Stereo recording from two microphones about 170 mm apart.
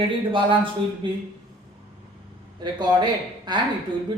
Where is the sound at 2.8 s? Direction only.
25° right (ahead or behind).